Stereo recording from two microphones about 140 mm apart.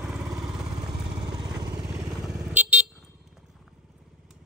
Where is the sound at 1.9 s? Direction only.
5° right (ahead or behind).